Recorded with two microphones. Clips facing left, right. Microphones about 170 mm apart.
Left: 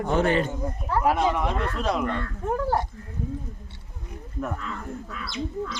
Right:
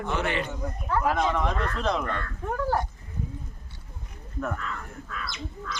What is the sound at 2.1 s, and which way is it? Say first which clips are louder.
Speech: left 4 dB; 25° left (ahead or behind).